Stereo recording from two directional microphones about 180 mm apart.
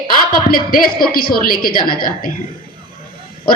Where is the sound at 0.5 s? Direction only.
55° left (ahead or behind).